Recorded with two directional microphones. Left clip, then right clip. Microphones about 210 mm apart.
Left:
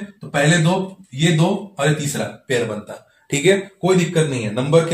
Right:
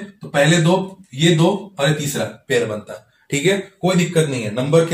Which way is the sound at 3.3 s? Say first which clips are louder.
Left 2 dB; 15° left (ahead or behind).